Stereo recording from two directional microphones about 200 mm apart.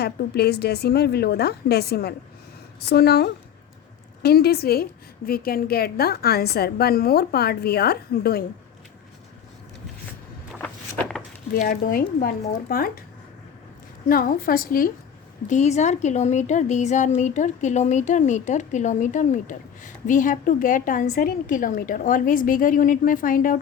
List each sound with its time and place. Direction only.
0.0 s a woman's voice: 55° left (ahead or behind)
10.6 s walk: 10° left (ahead or behind)
11.5 s a woman's voice: 45° left (ahead or behind)
14.1 s a woman's voice: 45° left (ahead or behind)